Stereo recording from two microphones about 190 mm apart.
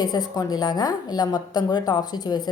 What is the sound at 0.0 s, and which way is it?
A man's voice, 20° left (ahead or behind).